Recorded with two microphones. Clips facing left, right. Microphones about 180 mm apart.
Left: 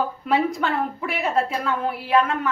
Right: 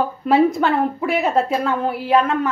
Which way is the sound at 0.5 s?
40° right (ahead or behind).